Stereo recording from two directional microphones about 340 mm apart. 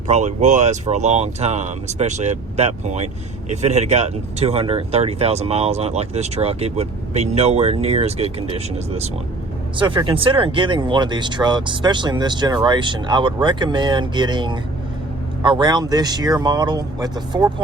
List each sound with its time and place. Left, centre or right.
0.1 s speech: centre